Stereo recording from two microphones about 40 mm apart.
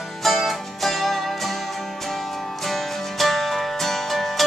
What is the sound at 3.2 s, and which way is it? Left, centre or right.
Music, centre.